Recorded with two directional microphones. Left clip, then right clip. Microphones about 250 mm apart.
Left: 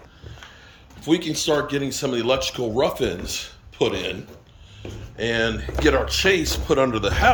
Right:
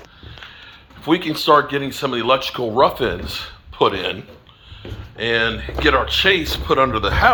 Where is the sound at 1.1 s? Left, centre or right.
Centre.